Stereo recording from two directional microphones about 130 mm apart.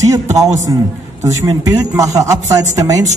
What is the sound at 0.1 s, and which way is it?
Speech, 25° right (ahead or behind).